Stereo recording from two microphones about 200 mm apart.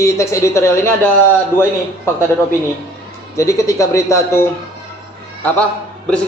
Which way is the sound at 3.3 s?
15° left (ahead or behind).